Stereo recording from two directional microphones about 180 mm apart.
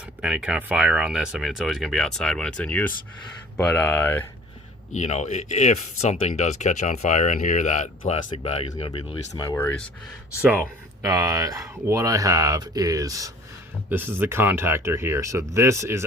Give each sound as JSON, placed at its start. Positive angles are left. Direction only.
{"t": 0.0, "sound": "speech", "side_deg": -5}
{"t": 4.9, "sound": "speech", "side_deg": 40}
{"t": 9.3, "sound": "speech", "side_deg": 20}
{"t": 10.4, "sound": "speech", "side_deg": -15}